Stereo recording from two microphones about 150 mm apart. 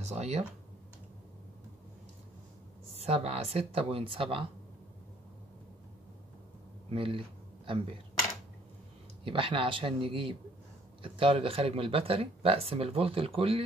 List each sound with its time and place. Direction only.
0.0 s speech: 45° right (ahead or behind)
3.0 s speech: 40° right (ahead or behind)
6.9 s a sound: 35° right (ahead or behind)
9.2 s speech: 35° right (ahead or behind)